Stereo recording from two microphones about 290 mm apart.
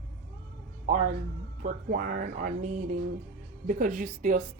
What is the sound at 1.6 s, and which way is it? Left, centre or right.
A woman's voice, right.